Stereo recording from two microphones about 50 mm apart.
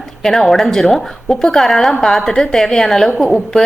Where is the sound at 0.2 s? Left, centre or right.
Centre.